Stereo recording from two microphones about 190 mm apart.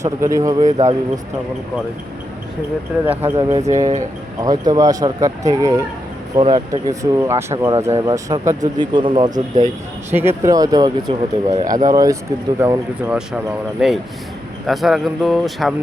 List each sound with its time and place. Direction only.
0.0 s speech: 15° right (ahead or behind)
3.1 s speech: 10° right (ahead or behind)
10.2 s speech: 15° right (ahead or behind)
13.1 s speech: 5° right (ahead or behind)